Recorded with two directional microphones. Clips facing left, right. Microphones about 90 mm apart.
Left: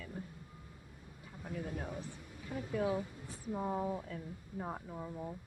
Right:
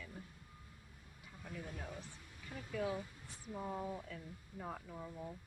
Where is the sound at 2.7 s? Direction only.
40° left (ahead or behind).